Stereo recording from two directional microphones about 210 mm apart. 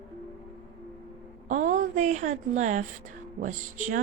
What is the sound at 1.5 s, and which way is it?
A woman's voice, 35° right (ahead or behind).